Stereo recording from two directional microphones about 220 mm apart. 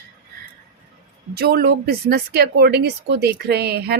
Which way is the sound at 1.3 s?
45° right (ahead or behind).